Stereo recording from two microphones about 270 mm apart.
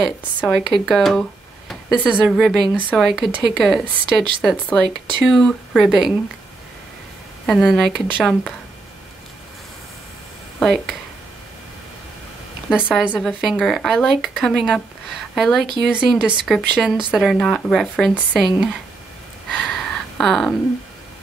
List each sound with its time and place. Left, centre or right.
0.0 s speech: centre
7.4 s speech: centre
10.6 s speech: centre
12.6 s speech: centre
19.5 s a sound: centre